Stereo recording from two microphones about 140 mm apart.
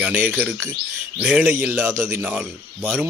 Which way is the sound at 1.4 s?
15° right (ahead or behind).